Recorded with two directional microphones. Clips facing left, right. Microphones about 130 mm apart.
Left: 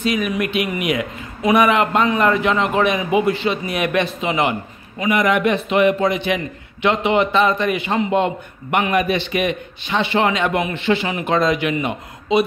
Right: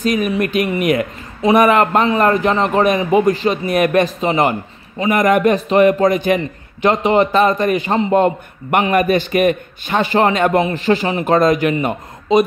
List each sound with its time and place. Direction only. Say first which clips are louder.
0.0 s a man's voice: right 3 dB; 45° right (ahead or behind)